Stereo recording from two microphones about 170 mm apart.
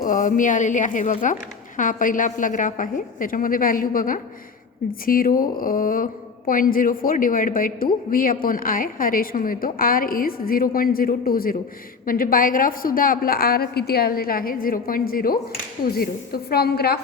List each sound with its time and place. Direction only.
0.0 s a woman's voice: 50° left (ahead or behind); by 17.0 s 65° left (ahead or behind)